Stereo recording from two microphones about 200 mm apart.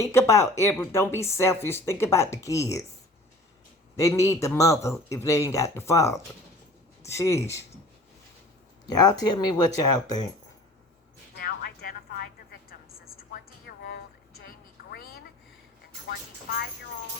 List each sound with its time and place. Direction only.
0.0 s a man's voice: 15° left (ahead or behind)
3.9 s a man's voice: 15° left (ahead or behind)
8.9 s speech: 20° left (ahead or behind)
11.3 s music: 45° left (ahead or behind)
13.1 s a sound: 50° left (ahead or behind)
16.0 s a sound: 50° left (ahead or behind)